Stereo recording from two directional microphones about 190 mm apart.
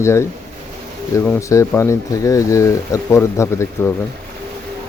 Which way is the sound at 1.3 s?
15° left (ahead or behind).